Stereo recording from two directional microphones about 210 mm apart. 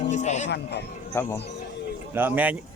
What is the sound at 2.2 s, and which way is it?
Speech, 10° right (ahead or behind).